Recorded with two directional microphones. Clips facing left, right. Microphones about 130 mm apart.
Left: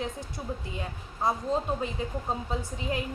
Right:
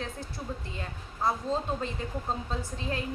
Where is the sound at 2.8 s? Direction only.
15° left (ahead or behind).